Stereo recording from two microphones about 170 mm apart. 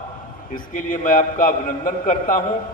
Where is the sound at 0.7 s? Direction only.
50° left (ahead or behind).